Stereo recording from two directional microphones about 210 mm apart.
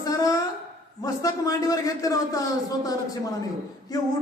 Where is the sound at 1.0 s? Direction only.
15° left (ahead or behind).